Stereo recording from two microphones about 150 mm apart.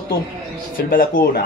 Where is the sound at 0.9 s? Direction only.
70° left (ahead or behind).